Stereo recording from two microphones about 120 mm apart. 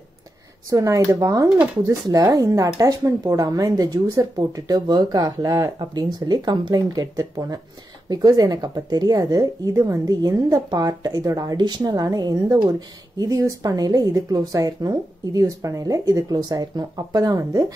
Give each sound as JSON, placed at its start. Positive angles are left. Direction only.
{"t": 0.7, "sound": "speech", "side_deg": -25}